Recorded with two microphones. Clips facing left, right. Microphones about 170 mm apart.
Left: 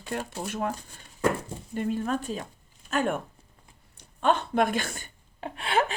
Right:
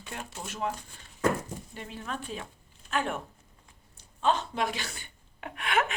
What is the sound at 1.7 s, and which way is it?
Speech, 50° left (ahead or behind).